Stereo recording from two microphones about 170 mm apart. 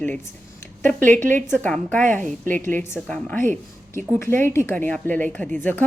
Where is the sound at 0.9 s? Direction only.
50° right (ahead or behind).